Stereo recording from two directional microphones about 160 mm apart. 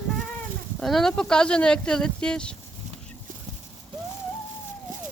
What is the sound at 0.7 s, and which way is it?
Speech, centre (ahead or behind).